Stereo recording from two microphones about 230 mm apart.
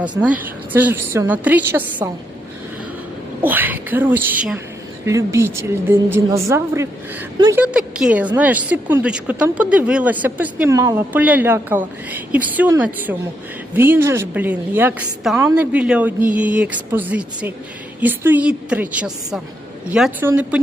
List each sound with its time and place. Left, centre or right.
0.2 s speech: centre
3.4 s speech: centre
7.6 s speech: centre